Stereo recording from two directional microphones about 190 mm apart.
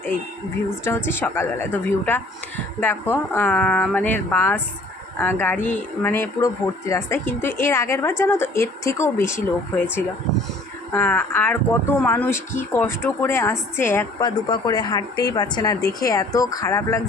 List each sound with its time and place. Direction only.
0.9 s speech: 10° left (ahead or behind)
14.2 s a woman's voice: 20° left (ahead or behind)